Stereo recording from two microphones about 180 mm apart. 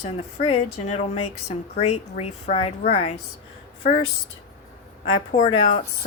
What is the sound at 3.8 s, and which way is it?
Speech, 50° left (ahead or behind).